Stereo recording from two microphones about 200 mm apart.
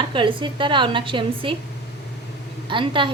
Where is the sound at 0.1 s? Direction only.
25° right (ahead or behind).